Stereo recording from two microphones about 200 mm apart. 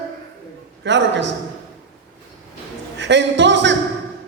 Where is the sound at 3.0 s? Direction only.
65° right (ahead or behind).